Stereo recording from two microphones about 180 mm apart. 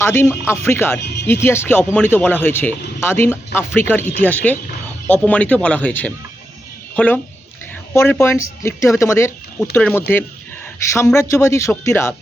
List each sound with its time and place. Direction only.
0.0 s speech: 15° left (ahead or behind)
1.0 s speech: 70° left (ahead or behind)
1.3 s speech: 15° left (ahead or behind)